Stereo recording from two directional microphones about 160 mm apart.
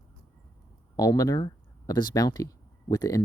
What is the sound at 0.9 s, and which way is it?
Speech, 20° left (ahead or behind).